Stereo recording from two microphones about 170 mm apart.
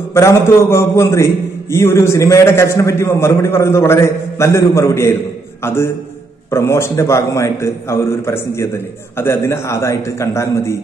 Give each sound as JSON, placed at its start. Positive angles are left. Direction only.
{"t": 0.1, "sound": "a man's voice", "side_deg": 15}